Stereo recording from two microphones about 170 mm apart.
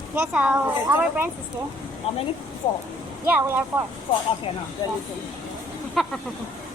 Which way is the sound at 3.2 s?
15° right (ahead or behind).